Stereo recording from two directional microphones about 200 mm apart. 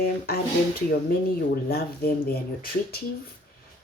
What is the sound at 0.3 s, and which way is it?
Speech, 50° left (ahead or behind).